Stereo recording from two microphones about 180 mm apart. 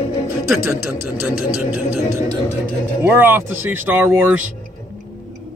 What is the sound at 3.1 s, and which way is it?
Speech, 10° right (ahead or behind).